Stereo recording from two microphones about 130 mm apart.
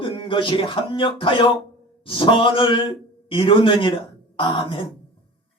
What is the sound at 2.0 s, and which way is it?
A man's voice, 40° left (ahead or behind).